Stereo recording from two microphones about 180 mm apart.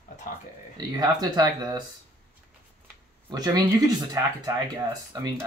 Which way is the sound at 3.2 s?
20° right (ahead or behind).